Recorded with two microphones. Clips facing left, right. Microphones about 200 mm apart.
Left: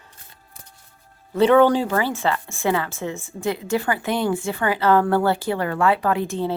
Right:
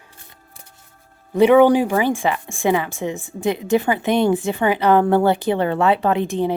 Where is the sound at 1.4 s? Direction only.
15° right (ahead or behind).